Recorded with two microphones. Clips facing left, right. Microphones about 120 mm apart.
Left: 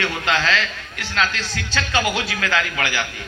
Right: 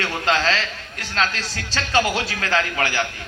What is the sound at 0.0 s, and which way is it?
A man's voice, 40° right (ahead or behind).